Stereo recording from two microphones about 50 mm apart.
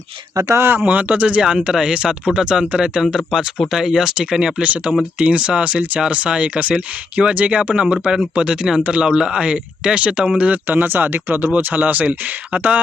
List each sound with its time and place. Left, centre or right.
0.3 s speech: right
0.6 s speech: right
0.9 s speech: right; by 4.6 s centre
4.6 s speech: right
10.7 s speech: right